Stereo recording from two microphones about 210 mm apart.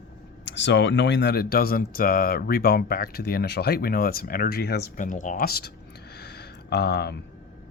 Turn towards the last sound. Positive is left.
turn(degrees=50)  # may be behind; listen again after turning